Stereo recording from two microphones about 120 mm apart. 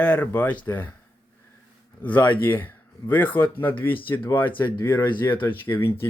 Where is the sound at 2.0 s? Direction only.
15° left (ahead or behind).